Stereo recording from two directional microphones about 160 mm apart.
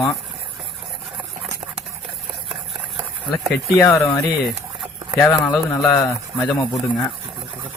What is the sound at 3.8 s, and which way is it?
Speech, 15° left (ahead or behind).